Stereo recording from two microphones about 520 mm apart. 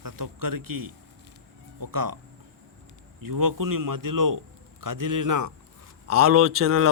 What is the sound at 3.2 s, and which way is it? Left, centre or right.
A man's voice, right.